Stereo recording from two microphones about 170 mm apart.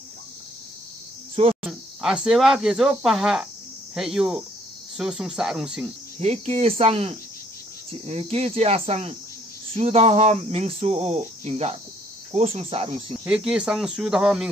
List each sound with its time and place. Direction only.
1.3 s cricket: 35° right (ahead or behind)
1.7 s speech: centre (ahead or behind)
6.1 s speech: 40° right (ahead or behind)
13.2 s speech: 5° right (ahead or behind)